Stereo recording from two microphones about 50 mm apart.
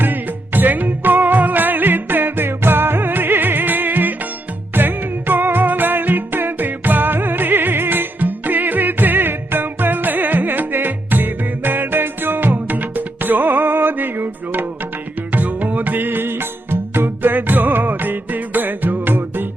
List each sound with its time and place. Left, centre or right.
0.0 s music: right